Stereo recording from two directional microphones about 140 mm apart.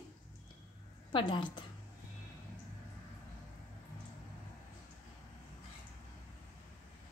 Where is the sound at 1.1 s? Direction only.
35° left (ahead or behind).